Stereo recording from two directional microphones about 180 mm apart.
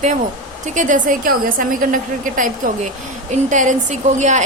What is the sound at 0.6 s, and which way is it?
A woman's voice, 45° right (ahead or behind).